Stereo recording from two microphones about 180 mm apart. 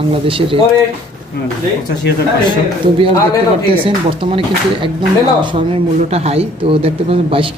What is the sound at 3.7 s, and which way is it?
A man's voice, 30° right (ahead or behind).